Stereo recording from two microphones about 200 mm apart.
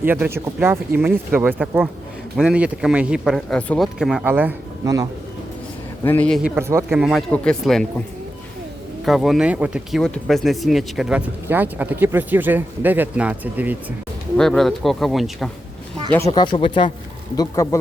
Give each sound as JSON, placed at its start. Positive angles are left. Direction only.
{"t": 0.0, "sound": "speech", "side_deg": -10}
{"t": 6.1, "sound": "speech", "side_deg": 5}
{"t": 6.6, "sound": "speech", "side_deg": -15}
{"t": 7.0, "sound": "speech", "side_deg": 0}
{"t": 9.0, "sound": "speech", "side_deg": 0}
{"t": 14.3, "sound": "speech", "side_deg": 0}
{"t": 16.2, "sound": "speech", "side_deg": 25}